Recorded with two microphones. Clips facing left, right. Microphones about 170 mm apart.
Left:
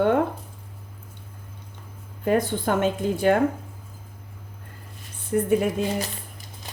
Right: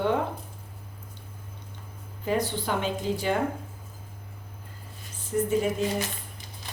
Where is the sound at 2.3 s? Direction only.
50° left (ahead or behind).